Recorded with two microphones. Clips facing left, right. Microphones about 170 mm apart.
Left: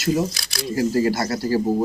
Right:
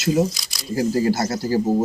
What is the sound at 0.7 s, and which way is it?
Speech, 20° right (ahead or behind).